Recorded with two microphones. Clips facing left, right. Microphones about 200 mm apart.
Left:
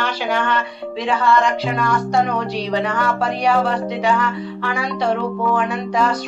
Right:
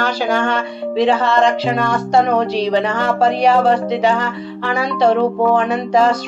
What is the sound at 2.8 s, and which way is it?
Music, 25° right (ahead or behind).